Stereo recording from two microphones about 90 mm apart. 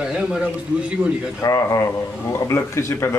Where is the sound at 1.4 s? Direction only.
35° left (ahead or behind).